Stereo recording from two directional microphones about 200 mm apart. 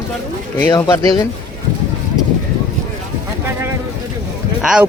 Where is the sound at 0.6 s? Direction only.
15° left (ahead or behind).